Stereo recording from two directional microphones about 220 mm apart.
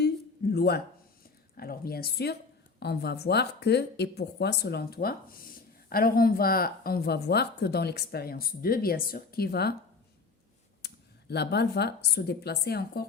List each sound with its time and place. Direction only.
0.5 s a woman's voice: 45° left (ahead or behind)
10.8 s speech: 50° left (ahead or behind)